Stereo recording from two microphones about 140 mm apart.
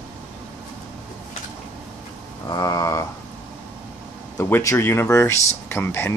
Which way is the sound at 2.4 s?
25° left (ahead or behind).